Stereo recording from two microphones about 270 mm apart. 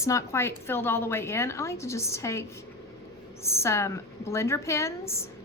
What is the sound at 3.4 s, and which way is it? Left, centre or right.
A woman's voice, centre.